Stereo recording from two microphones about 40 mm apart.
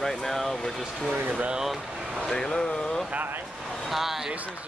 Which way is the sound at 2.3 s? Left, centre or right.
Centre.